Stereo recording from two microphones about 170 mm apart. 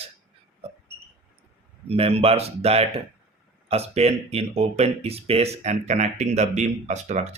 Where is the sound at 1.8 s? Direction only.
35° right (ahead or behind).